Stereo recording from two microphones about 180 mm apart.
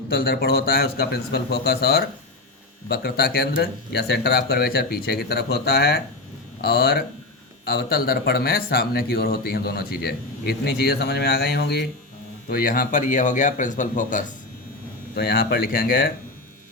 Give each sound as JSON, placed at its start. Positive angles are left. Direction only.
{"t": 0.1, "sound": "speech", "side_deg": 55}
{"t": 12.5, "sound": "speech", "side_deg": 55}
{"t": 15.1, "sound": "speech", "side_deg": 60}